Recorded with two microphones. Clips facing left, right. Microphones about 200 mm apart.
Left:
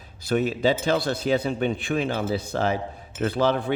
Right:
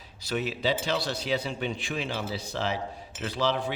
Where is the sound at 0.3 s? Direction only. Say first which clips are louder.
Left 7 dB; 50° left (ahead or behind).